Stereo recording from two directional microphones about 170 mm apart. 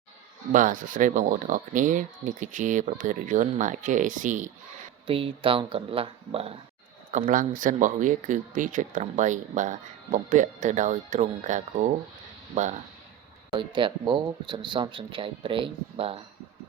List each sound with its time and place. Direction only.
0.5 s speech: 50° right (ahead or behind)
5.0 s speech: 30° right (ahead or behind)
7.1 s speech: 50° right (ahead or behind)
13.5 s speech: 30° right (ahead or behind)